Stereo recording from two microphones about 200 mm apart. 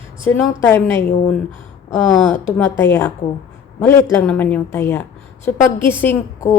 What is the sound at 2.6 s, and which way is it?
A woman's voice, 10° left (ahead or behind).